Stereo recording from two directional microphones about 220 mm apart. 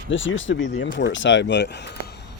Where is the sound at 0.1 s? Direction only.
60° left (ahead or behind).